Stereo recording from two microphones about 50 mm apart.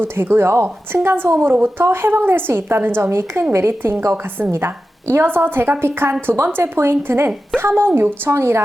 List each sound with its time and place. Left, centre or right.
0.0 s a woman's voice: right
4.5 s a woman's voice: right
8.3 s a woman's voice: right